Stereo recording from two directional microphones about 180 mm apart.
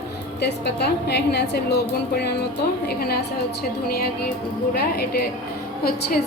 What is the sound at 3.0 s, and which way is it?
Speech, 60° left (ahead or behind).